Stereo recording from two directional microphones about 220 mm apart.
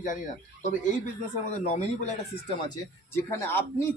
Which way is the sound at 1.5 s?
35° left (ahead or behind).